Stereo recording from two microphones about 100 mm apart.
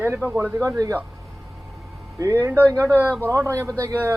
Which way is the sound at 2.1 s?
30° right (ahead or behind).